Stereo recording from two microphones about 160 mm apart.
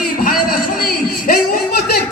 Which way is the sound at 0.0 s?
65° left (ahead or behind).